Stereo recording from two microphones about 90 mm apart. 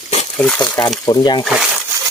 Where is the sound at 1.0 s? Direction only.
50° left (ahead or behind).